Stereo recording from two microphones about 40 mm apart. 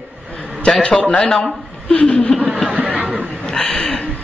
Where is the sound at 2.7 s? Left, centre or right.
Right.